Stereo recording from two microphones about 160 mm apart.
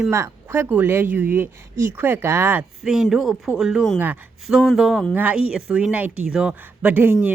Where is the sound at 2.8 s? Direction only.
Centre (ahead or behind).